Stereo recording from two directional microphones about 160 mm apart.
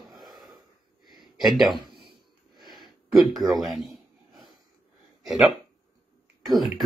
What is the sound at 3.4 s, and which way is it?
Speech, 25° right (ahead or behind).